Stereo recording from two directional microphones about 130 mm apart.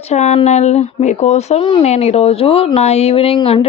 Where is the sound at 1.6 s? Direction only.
50° left (ahead or behind).